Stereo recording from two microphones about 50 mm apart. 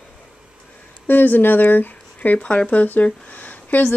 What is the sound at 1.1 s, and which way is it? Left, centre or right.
Speech, left.